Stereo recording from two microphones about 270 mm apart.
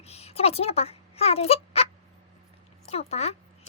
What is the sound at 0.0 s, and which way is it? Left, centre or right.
Fowl, left.